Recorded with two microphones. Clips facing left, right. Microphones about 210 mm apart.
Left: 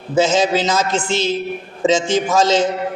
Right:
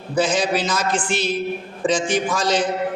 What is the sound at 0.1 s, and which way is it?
A man's voice, 25° left (ahead or behind).